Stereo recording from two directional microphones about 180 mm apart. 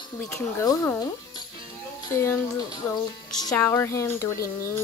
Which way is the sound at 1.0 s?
25° left (ahead or behind).